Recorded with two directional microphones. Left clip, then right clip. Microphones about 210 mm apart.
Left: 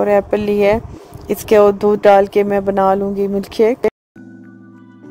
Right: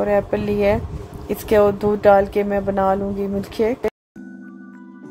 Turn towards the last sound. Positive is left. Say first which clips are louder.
# left 6 dB
turn(degrees=40)  # may be behind; listen again after turning